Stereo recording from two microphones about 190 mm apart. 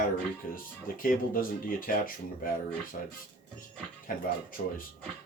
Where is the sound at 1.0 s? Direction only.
50° left (ahead or behind).